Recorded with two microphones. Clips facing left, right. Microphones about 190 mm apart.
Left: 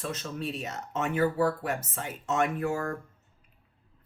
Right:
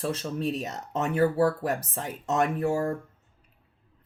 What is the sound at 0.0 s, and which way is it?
Speech, 35° right (ahead or behind).